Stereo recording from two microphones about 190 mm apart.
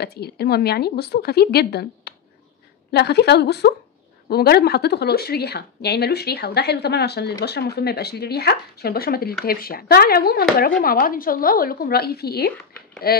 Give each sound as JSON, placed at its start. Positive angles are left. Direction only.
{"t": 0.0, "sound": "a woman's voice", "side_deg": 55}